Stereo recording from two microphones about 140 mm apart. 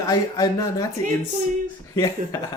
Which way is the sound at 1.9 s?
25° left (ahead or behind).